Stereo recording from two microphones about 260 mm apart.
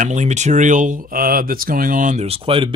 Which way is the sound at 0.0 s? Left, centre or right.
Right.